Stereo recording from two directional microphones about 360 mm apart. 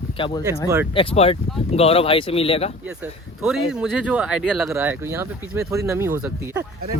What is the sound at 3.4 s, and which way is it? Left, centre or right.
Speech, centre.